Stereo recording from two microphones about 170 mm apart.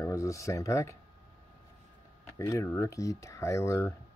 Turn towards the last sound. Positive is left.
turn(degrees=15)  # may be behind; listen again after turning